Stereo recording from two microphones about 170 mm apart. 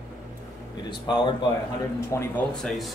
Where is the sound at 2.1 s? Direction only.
15° left (ahead or behind).